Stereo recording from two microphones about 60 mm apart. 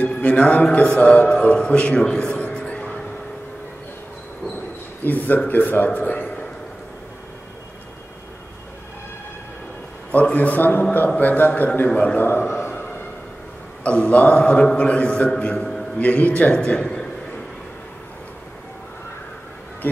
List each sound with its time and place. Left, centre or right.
0.0 s a man's voice: centre
5.0 s a man's voice: left
10.1 s a man's voice: left
11.9 s a man's voice: centre
12.2 s a sound: left
13.8 s a man's voice: left
15.5 s a sound: centre
16.0 s a man's voice: left
16.5 s a man's voice: centre